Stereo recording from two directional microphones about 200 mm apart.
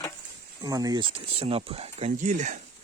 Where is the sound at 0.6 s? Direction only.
20° right (ahead or behind); by 2.6 s 40° right (ahead or behind).